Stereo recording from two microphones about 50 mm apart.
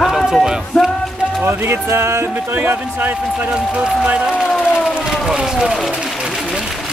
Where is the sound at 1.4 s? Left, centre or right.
Right.